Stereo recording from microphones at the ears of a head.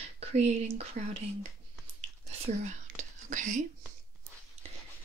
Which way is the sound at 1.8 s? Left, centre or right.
Right.